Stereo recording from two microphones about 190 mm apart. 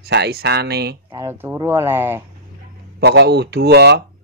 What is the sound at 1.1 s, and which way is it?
Speech, 15° right (ahead or behind).